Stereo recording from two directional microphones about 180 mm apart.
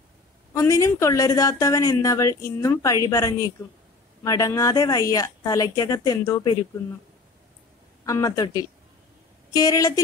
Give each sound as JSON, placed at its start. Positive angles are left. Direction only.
{"t": 0.5, "sound": "a woman's voice", "side_deg": 15}
{"t": 8.0, "sound": "speech", "side_deg": 20}
{"t": 9.5, "sound": "speech", "side_deg": 20}